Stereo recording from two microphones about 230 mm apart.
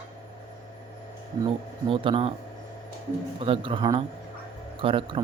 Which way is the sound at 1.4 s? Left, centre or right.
Right.